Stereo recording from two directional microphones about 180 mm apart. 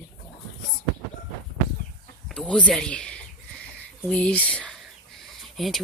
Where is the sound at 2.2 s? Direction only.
5° left (ahead or behind).